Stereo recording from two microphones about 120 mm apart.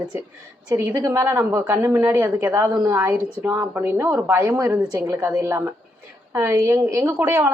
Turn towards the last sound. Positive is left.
turn(degrees=-20)  # may be behind; listen again after turning